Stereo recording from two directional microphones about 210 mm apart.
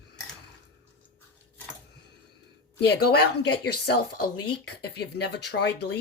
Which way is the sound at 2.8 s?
50° left (ahead or behind).